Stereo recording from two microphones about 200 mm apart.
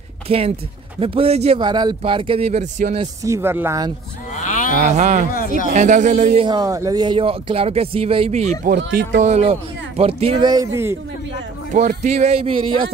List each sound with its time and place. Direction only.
0.3 s speech: 30° right (ahead or behind)
3.3 s speech: 10° right (ahead or behind)
4.7 s speech: 35° right (ahead or behind)
6.4 s speech: 20° right (ahead or behind)
8.6 s speech: 45° right (ahead or behind); by 11.0 s 15° right (ahead or behind)
11.7 s speech: 40° right (ahead or behind)